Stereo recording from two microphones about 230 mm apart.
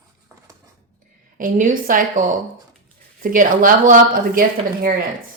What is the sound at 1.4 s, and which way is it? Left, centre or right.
Speech, right.